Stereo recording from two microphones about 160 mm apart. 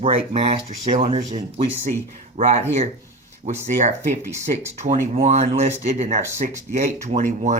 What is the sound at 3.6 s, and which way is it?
Speech, 45° right (ahead or behind).